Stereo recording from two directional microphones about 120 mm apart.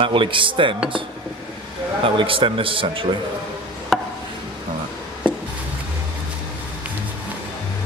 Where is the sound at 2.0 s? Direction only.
45° right (ahead or behind).